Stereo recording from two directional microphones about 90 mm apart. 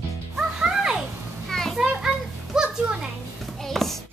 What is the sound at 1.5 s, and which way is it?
Children playing, 5° left (ahead or behind).